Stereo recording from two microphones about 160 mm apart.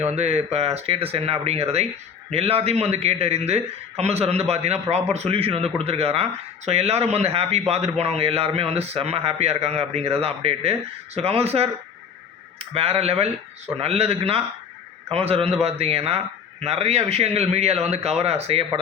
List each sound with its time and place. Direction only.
0.0 s a man's voice: 40° right (ahead or behind)